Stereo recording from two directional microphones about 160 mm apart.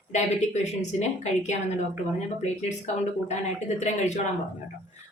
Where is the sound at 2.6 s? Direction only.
45° left (ahead or behind).